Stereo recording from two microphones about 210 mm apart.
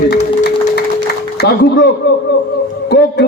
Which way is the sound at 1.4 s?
55° left (ahead or behind).